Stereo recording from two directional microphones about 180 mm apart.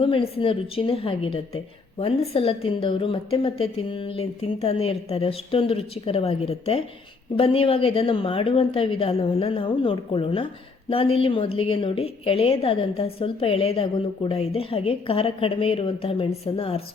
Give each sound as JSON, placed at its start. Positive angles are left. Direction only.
{"t": 0.0, "sound": "a woman's voice", "side_deg": 30}